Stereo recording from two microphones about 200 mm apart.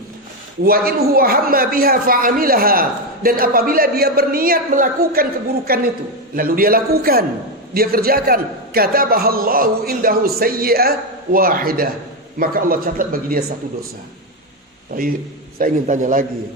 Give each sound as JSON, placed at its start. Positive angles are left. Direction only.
{"t": 0.6, "sound": "a man's voice", "side_deg": -45}
{"t": 14.9, "sound": "a man's voice", "side_deg": -45}